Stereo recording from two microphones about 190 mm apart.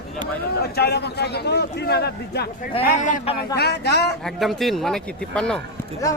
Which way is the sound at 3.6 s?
60° left (ahead or behind).